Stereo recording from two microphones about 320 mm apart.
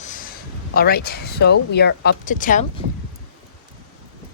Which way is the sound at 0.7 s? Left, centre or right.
Left.